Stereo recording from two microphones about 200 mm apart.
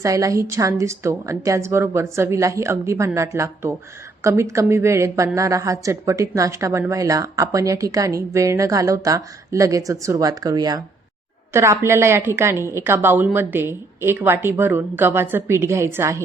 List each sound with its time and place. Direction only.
0.0 s a woman's voice: 15° right (ahead or behind)